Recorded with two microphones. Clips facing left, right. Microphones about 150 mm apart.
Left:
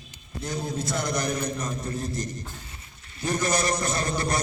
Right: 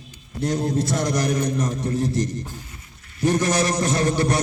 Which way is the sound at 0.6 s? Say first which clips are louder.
Right 6 dB; 90° right.